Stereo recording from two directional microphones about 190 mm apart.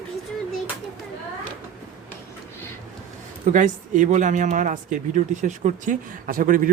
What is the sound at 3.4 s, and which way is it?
Speech, 40° right (ahead or behind).